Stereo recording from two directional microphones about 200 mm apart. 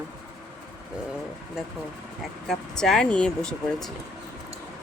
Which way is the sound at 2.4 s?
Centre (ahead or behind).